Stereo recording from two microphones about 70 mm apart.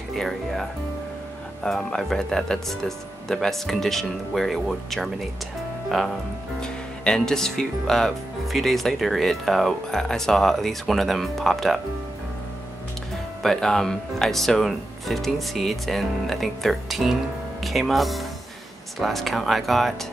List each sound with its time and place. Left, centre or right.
0.1 s speech: centre
6.6 s speech: centre
13.4 s speech: centre